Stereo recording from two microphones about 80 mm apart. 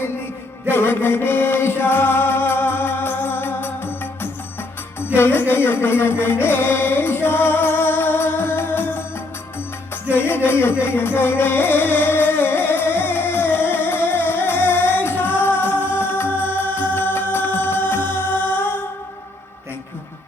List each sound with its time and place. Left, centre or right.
0.7 s music: left
10.1 s music: left